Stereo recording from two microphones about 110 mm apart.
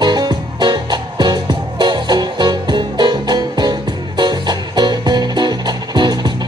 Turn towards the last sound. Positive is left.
turn(degrees=-40)  # may be behind; listen again after turning